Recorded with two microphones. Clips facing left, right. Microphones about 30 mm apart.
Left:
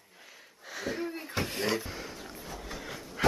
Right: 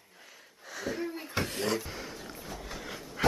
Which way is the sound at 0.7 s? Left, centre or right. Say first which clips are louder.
Even; centre.